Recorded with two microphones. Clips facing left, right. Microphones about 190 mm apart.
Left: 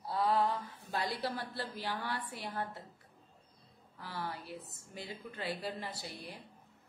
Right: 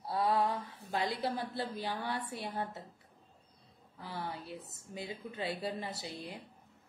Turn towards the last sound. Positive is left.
turn(degrees=-20)  # may be behind; listen again after turning